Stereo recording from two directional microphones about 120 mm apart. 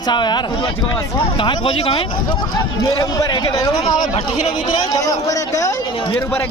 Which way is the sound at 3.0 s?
35° left (ahead or behind).